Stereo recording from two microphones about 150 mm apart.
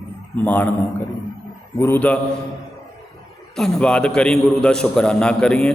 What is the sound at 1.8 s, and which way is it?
Speech, 10° left (ahead or behind).